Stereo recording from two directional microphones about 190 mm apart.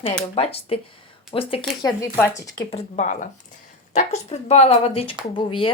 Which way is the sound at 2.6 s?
35° left (ahead or behind).